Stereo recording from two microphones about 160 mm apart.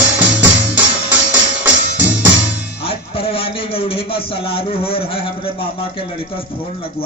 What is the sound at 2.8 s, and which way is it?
A man's voice, 35° left (ahead or behind).